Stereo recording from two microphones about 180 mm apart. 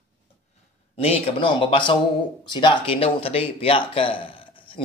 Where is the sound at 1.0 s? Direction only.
30° left (ahead or behind).